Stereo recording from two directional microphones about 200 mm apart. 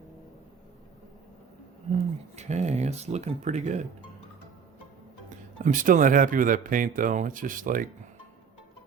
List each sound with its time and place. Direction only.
2.3 s speech: 35° right (ahead or behind)
5.3 s speech: 40° right (ahead or behind)